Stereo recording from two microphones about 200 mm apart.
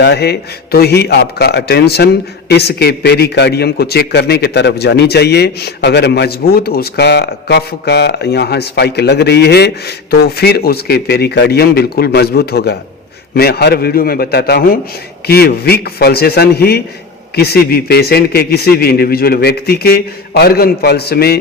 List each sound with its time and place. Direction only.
0.0 s a man's voice: 55° left (ahead or behind)